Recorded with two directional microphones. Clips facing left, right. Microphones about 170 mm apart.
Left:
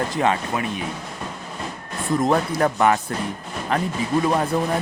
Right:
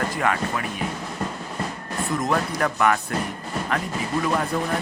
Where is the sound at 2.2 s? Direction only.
30° left (ahead or behind).